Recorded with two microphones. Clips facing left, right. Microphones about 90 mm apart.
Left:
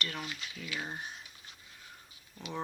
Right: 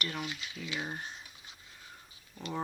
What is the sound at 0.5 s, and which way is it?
Speech, 20° right (ahead or behind).